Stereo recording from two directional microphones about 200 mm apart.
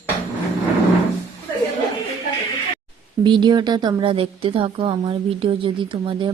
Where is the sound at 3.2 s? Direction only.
20° right (ahead or behind).